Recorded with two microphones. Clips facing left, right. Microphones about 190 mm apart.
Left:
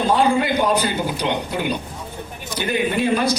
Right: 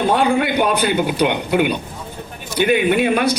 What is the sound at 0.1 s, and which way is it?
A man's voice, 65° right (ahead or behind).